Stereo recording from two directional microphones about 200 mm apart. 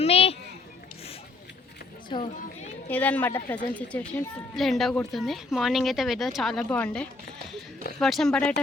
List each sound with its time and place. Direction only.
0.0 s a sound: 30° left (ahead or behind)
2.0 s run: 20° left (ahead or behind)
2.9 s a woman's voice: 10° left (ahead or behind)